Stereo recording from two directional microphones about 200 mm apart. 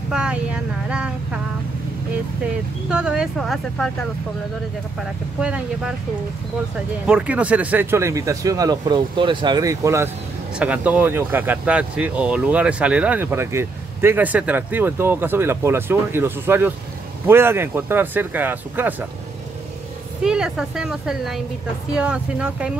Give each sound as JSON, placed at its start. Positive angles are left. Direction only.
{"t": 0.1, "sound": "vehicle", "side_deg": -5}
{"t": 2.9, "sound": "a woman's voice", "side_deg": -5}
{"t": 5.4, "sound": "a woman's voice", "side_deg": -5}
{"t": 7.1, "sound": "speech", "side_deg": -5}
{"t": 20.2, "sound": "a woman's voice", "side_deg": -5}